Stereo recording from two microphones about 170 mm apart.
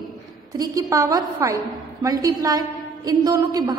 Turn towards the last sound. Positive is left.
turn(degrees=-20)  # may be behind; listen again after turning